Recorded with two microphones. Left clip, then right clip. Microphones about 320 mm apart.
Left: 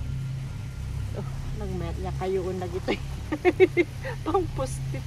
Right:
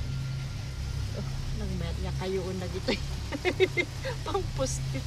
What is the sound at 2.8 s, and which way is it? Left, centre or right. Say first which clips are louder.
Speech: even; centre.